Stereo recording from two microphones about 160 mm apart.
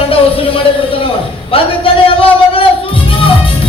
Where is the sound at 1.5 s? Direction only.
35° left (ahead or behind).